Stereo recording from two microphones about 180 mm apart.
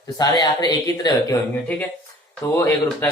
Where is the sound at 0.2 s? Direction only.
20° left (ahead or behind).